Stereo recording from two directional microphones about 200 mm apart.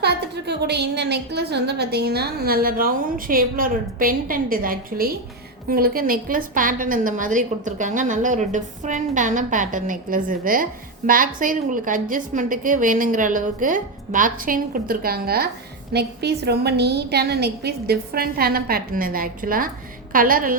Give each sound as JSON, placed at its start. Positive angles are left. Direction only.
{"t": 0.0, "sound": "a woman's voice", "side_deg": -55}